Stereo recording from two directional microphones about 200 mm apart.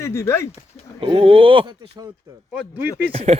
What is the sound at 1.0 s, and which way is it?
Speech, 25° right (ahead or behind).